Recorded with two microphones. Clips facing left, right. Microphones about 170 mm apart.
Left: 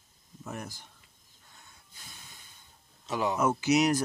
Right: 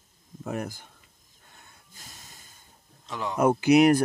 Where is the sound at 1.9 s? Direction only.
40° right (ahead or behind).